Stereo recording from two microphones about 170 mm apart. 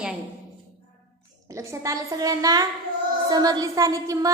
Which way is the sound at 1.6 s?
20° right (ahead or behind).